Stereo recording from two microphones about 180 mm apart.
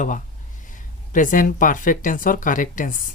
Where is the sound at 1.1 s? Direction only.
45° left (ahead or behind).